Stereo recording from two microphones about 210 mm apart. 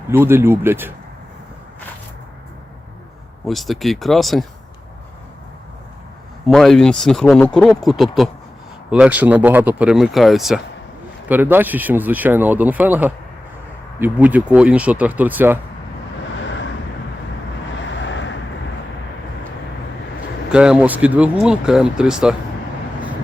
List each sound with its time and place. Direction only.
0.1 s speech: 10° right (ahead or behind)
3.4 s speech: centre (ahead or behind)
6.5 s speech: centre (ahead or behind)
16.4 s vehicle: 60° left (ahead or behind)
17.9 s vehicle: 60° left (ahead or behind)
20.5 s speech: 5° right (ahead or behind)